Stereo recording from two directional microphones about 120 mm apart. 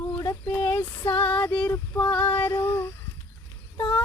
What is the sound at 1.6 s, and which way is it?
Speech, 20° left (ahead or behind).